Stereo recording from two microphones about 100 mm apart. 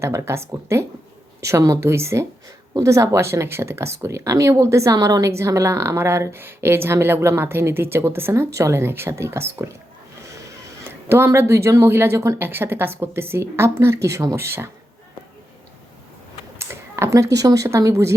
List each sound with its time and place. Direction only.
0.0 s speech: 25° right (ahead or behind)
16.6 s speech: 25° right (ahead or behind)